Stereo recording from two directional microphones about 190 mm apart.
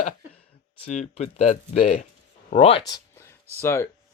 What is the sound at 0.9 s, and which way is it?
Speech, 35° left (ahead or behind).